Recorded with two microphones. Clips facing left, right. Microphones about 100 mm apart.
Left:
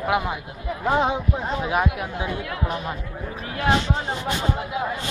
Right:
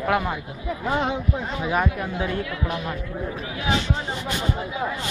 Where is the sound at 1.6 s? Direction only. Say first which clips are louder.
Right 2 dB; 10° left (ahead or behind).